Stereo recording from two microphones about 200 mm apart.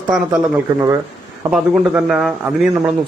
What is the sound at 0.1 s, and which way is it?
Speech, centre (ahead or behind).